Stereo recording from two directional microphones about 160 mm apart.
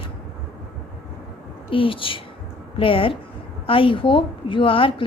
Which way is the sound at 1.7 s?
35° left (ahead or behind).